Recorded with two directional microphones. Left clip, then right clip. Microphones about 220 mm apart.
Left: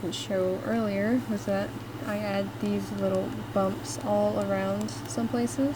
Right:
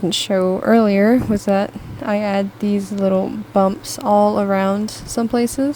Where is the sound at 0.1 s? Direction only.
40° right (ahead or behind).